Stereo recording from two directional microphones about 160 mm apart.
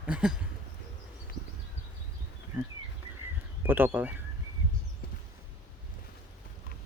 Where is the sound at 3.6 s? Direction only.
10° right (ahead or behind).